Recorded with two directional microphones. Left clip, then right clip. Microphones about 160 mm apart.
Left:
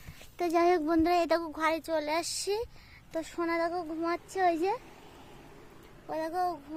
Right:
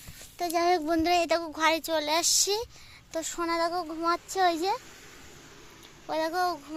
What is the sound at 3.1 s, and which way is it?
Speech, 15° left (ahead or behind).